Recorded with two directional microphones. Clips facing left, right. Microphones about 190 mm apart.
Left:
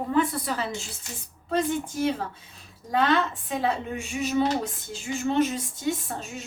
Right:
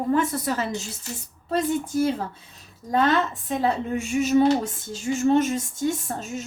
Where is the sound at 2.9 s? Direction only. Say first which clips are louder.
Right 2 dB; 40° right (ahead or behind).